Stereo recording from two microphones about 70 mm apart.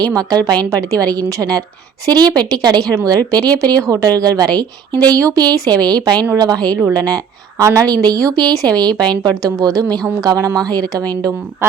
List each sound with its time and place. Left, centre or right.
0.2 s speech: right
0.7 s a woman's voice: right
2.0 s speech: right
3.0 s a woman's voice: right
4.2 s speech: right
5.1 s speech: right
6.3 s a woman's voice: right
7.6 s a woman's voice: right
8.7 s a woman's voice: right
9.4 s a woman's voice: right